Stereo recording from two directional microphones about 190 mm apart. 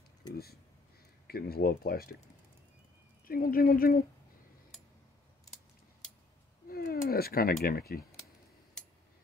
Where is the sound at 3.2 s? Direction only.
50° left (ahead or behind).